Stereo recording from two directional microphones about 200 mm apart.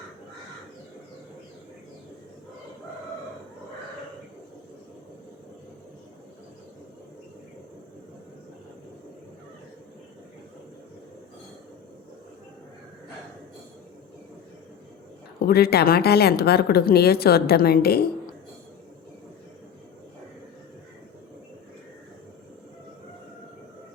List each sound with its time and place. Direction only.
15.4 s speech: 50° left (ahead or behind)